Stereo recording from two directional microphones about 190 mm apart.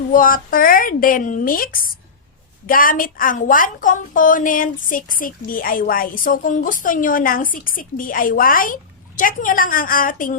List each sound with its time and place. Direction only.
0.1 s a woman's voice: 45° left (ahead or behind)